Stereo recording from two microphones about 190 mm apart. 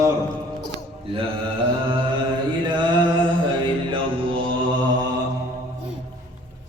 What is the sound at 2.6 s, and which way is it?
Mantra, 25° right (ahead or behind).